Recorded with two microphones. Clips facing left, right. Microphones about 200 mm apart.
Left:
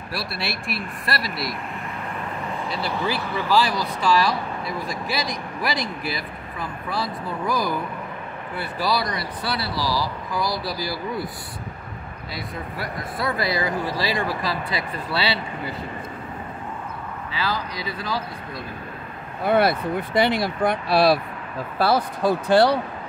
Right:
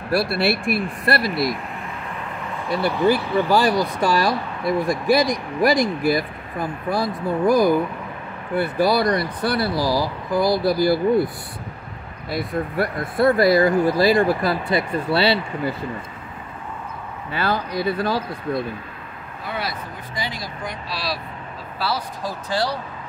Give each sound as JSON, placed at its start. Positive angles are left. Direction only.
{"t": 0.1, "sound": "speech", "side_deg": -55}
{"t": 2.7, "sound": "speech", "side_deg": -55}
{"t": 12.3, "sound": "speech", "side_deg": -55}
{"t": 17.3, "sound": "speech", "side_deg": -55}
{"t": 19.4, "sound": "speech", "side_deg": 60}